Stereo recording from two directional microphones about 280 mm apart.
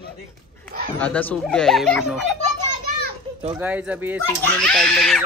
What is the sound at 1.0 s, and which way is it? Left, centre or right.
Speech, centre.